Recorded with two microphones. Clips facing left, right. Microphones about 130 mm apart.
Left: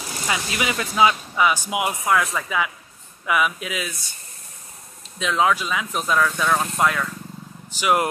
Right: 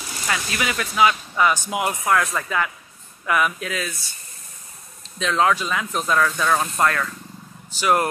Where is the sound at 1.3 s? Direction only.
10° left (ahead or behind).